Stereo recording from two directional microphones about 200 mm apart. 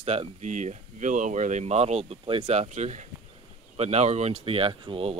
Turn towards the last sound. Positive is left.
turn(degrees=-30)  # may be behind; listen again after turning